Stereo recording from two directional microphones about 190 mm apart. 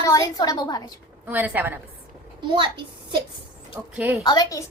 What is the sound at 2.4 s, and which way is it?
Speech, 25° right (ahead or behind).